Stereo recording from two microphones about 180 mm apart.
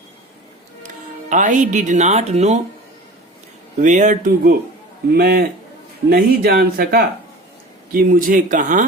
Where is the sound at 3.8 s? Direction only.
45° right (ahead or behind).